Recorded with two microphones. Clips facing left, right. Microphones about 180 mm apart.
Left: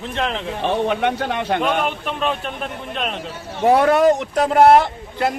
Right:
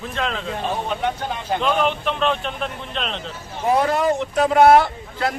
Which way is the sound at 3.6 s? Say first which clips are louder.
Left 5 dB; 65° left (ahead or behind).